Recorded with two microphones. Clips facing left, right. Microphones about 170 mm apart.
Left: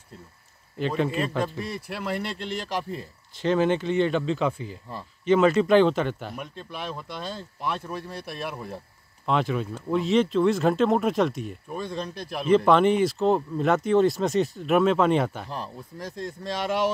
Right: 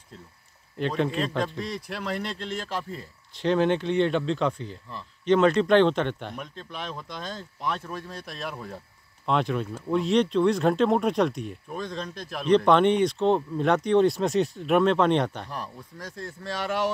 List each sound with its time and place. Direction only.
0.7 s a man's voice: centre (ahead or behind)
3.3 s a man's voice: centre (ahead or behind)
15.5 s a man's voice: 25° left (ahead or behind)